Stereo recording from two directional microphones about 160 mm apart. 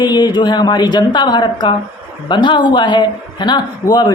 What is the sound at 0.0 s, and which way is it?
Speech, 25° left (ahead or behind).